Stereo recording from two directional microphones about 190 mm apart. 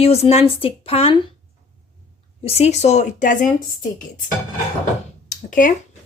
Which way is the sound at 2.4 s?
35° left (ahead or behind).